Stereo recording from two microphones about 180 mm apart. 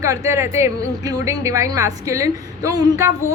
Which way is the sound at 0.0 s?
15° right (ahead or behind).